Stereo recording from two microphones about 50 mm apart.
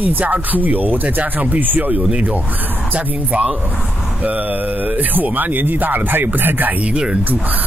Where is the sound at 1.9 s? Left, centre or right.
Right.